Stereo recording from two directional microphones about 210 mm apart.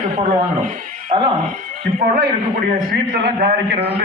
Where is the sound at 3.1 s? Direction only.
50° right (ahead or behind).